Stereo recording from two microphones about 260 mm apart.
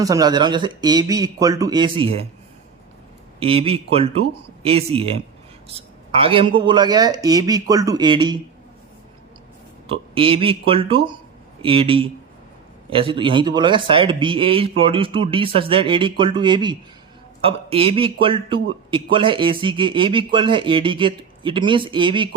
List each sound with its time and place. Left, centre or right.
0.0 s speech: centre
3.4 s a man's voice: right
9.8 s a man's voice: right